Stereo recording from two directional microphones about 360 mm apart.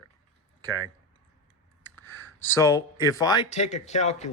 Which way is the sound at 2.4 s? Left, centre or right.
Centre.